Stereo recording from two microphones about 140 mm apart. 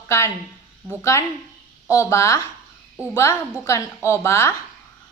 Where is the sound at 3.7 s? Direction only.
20° left (ahead or behind).